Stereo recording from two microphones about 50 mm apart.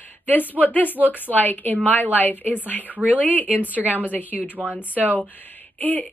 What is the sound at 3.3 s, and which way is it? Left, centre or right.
Speech, left.